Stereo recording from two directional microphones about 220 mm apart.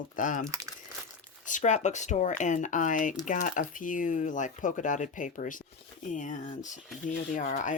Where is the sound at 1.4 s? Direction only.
35° left (ahead or behind).